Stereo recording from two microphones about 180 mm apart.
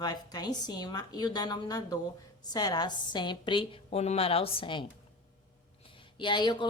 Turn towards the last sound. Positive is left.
turn(degrees=25)  # may be behind; listen again after turning